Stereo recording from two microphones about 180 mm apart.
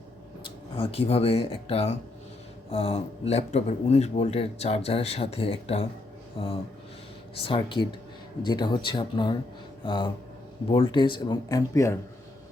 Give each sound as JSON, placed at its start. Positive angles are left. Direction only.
{"t": 0.8, "sound": "speech", "side_deg": 35}
{"t": 7.4, "sound": "speech", "side_deg": 30}